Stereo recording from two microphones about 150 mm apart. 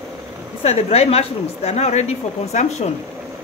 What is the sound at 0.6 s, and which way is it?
Speech, 45° left (ahead or behind).